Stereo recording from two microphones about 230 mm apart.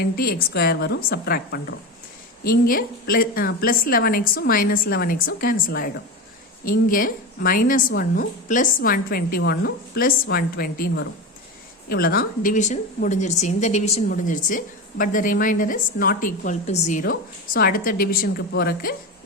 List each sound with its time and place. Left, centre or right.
0.0 s a woman's voice: left